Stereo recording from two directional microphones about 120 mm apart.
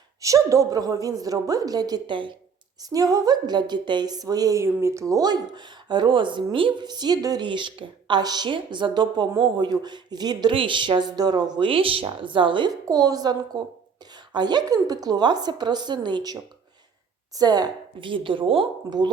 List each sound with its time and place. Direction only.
0.2 s a woman's voice: 25° right (ahead or behind)
2.9 s a woman's voice: 30° right (ahead or behind); by 18.7 s 50° right (ahead or behind)
18.9 s a woman's voice: 35° right (ahead or behind)